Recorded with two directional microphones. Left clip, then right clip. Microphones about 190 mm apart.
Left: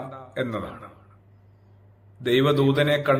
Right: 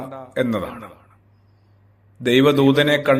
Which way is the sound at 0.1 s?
40° right (ahead or behind).